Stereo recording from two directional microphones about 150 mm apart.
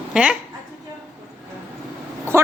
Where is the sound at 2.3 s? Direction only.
15° right (ahead or behind).